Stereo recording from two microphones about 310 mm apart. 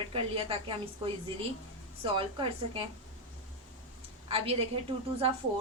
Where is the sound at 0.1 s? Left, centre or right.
Centre.